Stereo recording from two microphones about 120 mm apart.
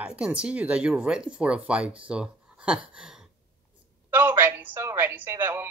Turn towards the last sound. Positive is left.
turn(degrees=-20)  # may be behind; listen again after turning